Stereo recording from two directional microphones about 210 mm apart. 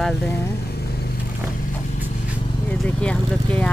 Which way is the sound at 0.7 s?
50° left (ahead or behind).